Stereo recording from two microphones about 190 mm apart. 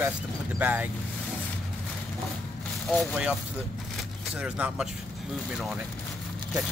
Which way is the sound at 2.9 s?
Centre (ahead or behind).